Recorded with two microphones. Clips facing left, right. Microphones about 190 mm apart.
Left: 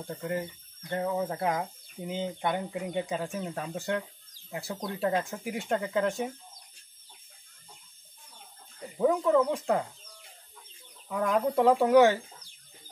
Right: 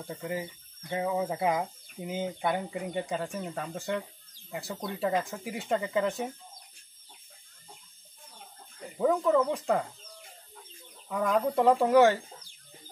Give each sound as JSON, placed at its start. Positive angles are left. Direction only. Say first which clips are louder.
{"t": 0.0, "sound": "speech", "louder": "left 2 dB", "side_deg": 0}
{"t": 8.9, "sound": "speech", "louder": "left 1 dB", "side_deg": 0}
{"t": 11.1, "sound": "speech", "louder": "even", "side_deg": 0}